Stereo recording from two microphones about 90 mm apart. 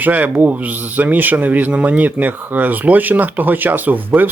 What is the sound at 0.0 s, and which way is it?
Speech, 20° right (ahead or behind).